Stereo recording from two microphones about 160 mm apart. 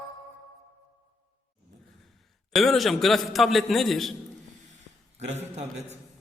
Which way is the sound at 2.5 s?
Centre (ahead or behind).